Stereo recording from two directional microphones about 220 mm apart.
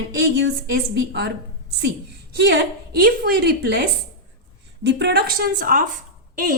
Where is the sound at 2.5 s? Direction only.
45° right (ahead or behind).